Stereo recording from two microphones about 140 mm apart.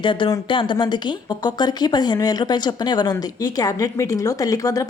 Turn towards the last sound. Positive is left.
turn(degrees=25)  # may be behind; listen again after turning